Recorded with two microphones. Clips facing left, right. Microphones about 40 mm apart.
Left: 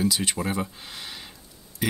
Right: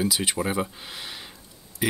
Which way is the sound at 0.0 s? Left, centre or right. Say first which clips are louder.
Even; centre.